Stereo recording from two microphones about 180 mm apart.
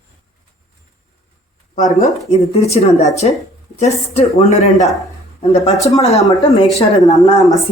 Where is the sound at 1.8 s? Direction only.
40° left (ahead or behind).